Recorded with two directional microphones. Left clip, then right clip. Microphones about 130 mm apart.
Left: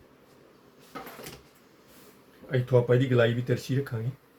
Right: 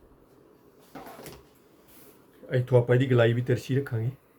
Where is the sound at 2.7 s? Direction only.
45° right (ahead or behind).